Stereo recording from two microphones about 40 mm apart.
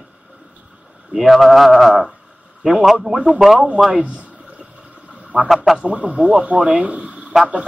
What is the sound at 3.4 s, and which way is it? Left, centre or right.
Speech, centre.